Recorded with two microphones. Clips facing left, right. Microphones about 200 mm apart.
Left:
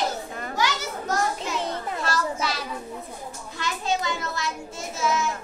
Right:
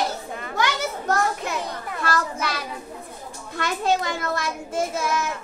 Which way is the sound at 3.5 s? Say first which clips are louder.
Right 5 dB; 55° right (ahead or behind).